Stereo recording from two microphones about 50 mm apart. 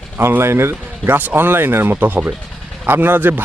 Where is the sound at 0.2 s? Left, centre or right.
Right.